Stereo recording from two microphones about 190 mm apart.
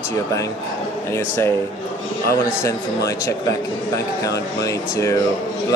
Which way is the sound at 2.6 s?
15° left (ahead or behind).